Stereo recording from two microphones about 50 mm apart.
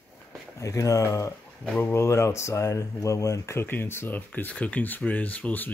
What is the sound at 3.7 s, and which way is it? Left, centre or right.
Speech, left.